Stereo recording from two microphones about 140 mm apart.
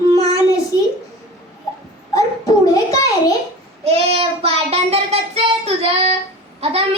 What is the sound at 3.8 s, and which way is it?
Child singing, 45° right (ahead or behind).